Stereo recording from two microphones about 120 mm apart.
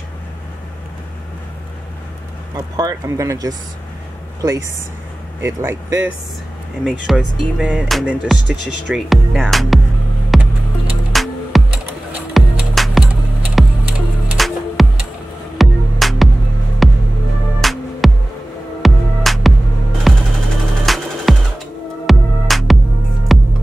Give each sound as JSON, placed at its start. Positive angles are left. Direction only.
{"t": 2.5, "sound": "speech", "side_deg": -30}
{"t": 6.8, "sound": "speech", "side_deg": 0}
{"t": 10.3, "sound": "music", "side_deg": 0}